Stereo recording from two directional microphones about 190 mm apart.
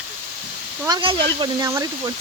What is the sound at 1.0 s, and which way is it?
Speech, 25° right (ahead or behind).